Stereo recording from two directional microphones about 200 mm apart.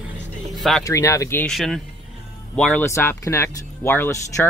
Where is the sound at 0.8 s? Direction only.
15° left (ahead or behind).